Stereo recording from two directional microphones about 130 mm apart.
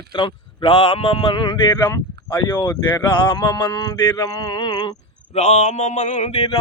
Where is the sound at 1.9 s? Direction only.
20° left (ahead or behind).